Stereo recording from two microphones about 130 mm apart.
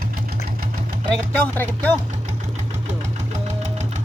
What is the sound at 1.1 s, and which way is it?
Chopping, 10° left (ahead or behind).